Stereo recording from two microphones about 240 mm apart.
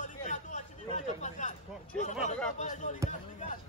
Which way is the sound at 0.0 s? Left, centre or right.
Left.